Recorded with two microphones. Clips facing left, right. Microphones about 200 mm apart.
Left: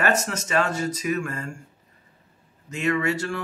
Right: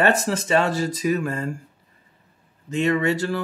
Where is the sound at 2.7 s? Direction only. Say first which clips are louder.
Right 3 dB; 30° right (ahead or behind).